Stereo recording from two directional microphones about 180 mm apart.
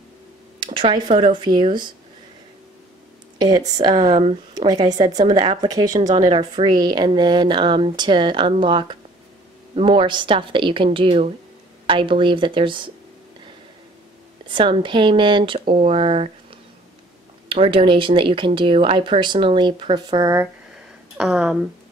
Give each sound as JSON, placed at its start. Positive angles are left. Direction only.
{"t": 0.6, "sound": "speech", "side_deg": -30}
{"t": 3.3, "sound": "speech", "side_deg": -20}
{"t": 14.5, "sound": "speech", "side_deg": -30}
{"t": 17.5, "sound": "speech", "side_deg": -30}
{"t": 21.2, "sound": "speech", "side_deg": -5}